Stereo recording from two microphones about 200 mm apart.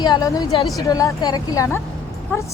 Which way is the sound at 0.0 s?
20° left (ahead or behind).